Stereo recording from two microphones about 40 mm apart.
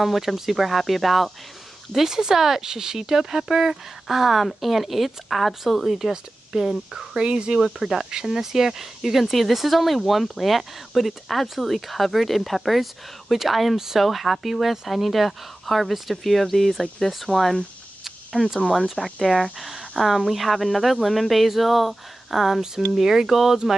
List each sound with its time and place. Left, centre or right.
0.0 s speech: centre
1.9 s speech: centre
7.2 s speech: right
7.5 s speech: centre
14.0 s speech: centre
18.0 s a sound: centre
18.9 s speech: centre